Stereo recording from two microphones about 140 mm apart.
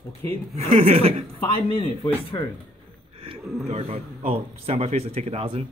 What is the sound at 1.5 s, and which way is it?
Speech, 30° left (ahead or behind).